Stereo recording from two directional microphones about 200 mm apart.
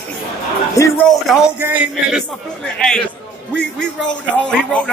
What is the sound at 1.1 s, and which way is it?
Speech, centre (ahead or behind).